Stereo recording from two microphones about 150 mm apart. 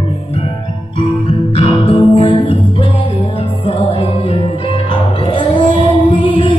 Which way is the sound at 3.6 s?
40° left (ahead or behind).